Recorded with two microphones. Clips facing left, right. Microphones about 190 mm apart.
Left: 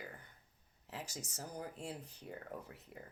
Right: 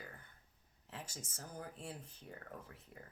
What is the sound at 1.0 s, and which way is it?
Speech, 15° left (ahead or behind).